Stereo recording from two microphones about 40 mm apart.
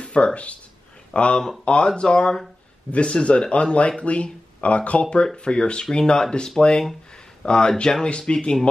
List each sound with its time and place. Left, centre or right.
0.0 s speech: left
5.3 s speech: centre